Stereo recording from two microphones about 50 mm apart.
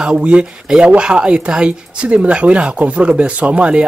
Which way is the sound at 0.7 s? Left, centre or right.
Centre.